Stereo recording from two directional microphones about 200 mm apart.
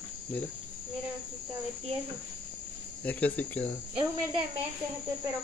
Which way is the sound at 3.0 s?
10° left (ahead or behind).